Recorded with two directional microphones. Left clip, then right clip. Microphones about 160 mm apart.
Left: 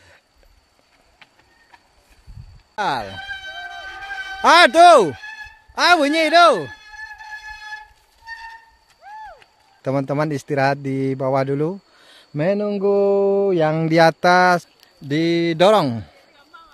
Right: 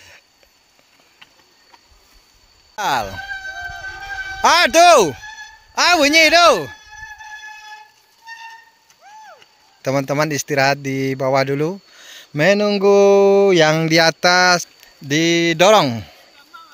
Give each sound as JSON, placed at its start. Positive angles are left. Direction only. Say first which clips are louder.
{"t": 2.7, "sound": "speech", "louder": "right 3 dB", "side_deg": -5}
{"t": 3.2, "sound": "music", "louder": "right 3 dB", "side_deg": 10}
{"t": 4.4, "sound": "speech", "louder": "left 1 dB", "side_deg": 0}
{"t": 5.1, "sound": "a sound", "louder": "even", "side_deg": 20}
{"t": 5.8, "sound": "speech", "louder": "right 3 dB", "side_deg": 5}
{"t": 6.7, "sound": "a sound", "louder": "even", "side_deg": 15}
{"t": 9.8, "sound": "a man's voice", "louder": "right 3 dB", "side_deg": 10}
{"t": 12.4, "sound": "speech", "louder": "right 6 dB", "side_deg": -10}
{"t": 13.7, "sound": "speech", "louder": "even", "side_deg": 10}
{"t": 14.8, "sound": "speech", "louder": "right 3 dB", "side_deg": 0}
{"t": 16.5, "sound": "a sound", "louder": "right 4 dB", "side_deg": 25}